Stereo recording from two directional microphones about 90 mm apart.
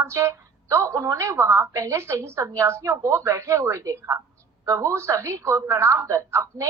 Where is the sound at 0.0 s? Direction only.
30° right (ahead or behind).